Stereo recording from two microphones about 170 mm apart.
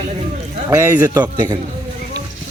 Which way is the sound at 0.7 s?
15° right (ahead or behind).